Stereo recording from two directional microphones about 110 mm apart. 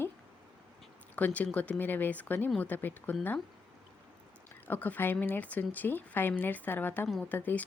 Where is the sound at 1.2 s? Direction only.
15° left (ahead or behind).